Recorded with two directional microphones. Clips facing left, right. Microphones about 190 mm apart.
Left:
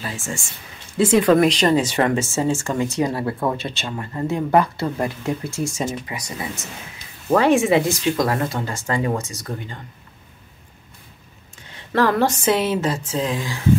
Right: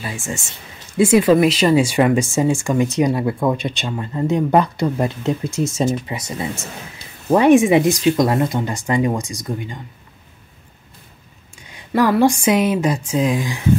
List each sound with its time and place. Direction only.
0.9 s speech: 10° right (ahead or behind)
11.7 s speech: 10° right (ahead or behind)